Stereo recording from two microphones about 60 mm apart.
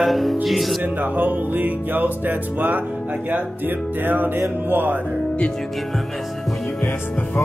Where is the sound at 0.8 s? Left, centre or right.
Right.